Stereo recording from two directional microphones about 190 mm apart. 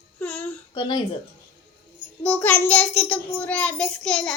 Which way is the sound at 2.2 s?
10° left (ahead or behind).